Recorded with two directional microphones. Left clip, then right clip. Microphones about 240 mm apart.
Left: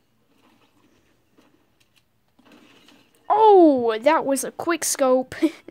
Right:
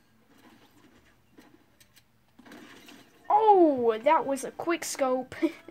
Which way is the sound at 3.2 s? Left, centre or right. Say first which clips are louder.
Left 7 dB; left.